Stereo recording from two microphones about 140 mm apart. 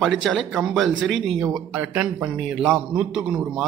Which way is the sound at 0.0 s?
Centre (ahead or behind).